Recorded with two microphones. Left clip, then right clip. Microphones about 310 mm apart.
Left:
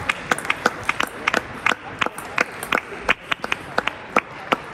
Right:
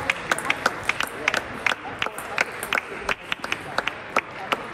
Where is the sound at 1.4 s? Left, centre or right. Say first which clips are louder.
Left 3 dB; centre.